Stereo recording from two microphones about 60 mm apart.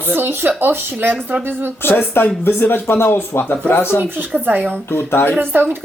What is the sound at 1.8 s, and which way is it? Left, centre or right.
Speech, left.